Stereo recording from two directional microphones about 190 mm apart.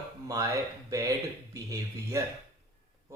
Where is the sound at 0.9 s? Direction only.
15° right (ahead or behind).